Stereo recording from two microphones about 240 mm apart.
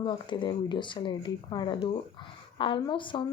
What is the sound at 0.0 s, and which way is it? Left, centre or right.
A woman's voice, centre.